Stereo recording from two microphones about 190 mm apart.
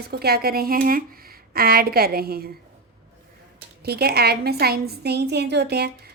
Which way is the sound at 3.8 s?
55° right (ahead or behind).